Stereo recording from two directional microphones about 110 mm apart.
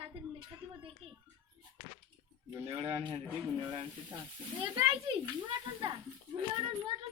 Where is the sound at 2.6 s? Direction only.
65° right (ahead or behind).